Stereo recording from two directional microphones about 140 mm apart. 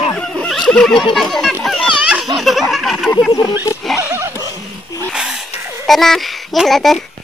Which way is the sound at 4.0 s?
20° right (ahead or behind).